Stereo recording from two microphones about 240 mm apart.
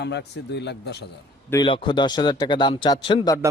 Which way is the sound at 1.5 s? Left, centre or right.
Centre.